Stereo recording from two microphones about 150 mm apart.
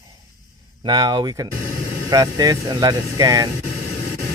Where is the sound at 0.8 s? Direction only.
30° right (ahead or behind).